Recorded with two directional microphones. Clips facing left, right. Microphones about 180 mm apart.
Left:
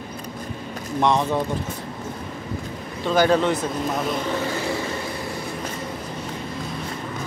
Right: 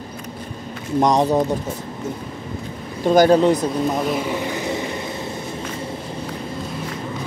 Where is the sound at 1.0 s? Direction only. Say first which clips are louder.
Right 3 dB; 40° right (ahead or behind).